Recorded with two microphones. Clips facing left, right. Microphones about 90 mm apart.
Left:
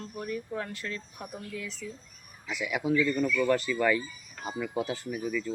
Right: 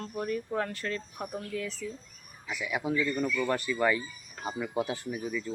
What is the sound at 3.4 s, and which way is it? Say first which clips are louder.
Speech: left 1 dB; 15° right (ahead or behind).